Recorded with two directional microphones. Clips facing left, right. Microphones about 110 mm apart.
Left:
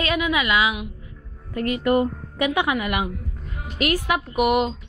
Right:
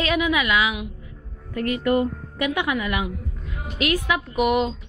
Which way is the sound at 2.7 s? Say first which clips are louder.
Left 1 dB; 55° left (ahead or behind).